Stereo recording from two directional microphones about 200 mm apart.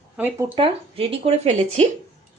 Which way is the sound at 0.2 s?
10° right (ahead or behind).